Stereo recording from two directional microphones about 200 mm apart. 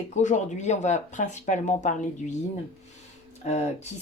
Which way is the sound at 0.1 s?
35° left (ahead or behind).